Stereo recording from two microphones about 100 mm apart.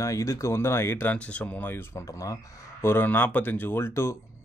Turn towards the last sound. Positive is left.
turn(degrees=25)  # may be behind; listen again after turning